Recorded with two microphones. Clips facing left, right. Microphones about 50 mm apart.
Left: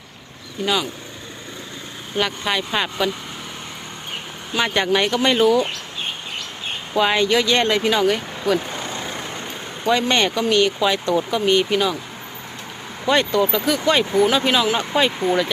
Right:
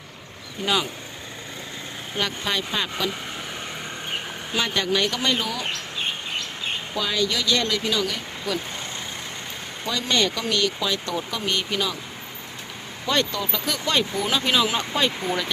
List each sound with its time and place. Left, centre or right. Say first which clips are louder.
0.6 s speech: left 2 dB; centre
2.1 s speech: left 4 dB; centre
4.5 s speech: left 5 dB; left
6.9 s speech: left 9 dB; left
9.8 s speech: left 6 dB; left
13.1 s speech: left 7 dB; left